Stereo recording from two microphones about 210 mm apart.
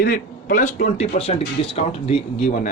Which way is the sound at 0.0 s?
45° left (ahead or behind).